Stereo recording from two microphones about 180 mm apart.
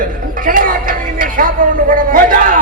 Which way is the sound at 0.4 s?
50° right (ahead or behind).